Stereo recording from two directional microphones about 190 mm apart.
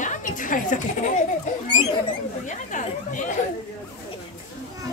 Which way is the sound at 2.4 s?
40° left (ahead or behind).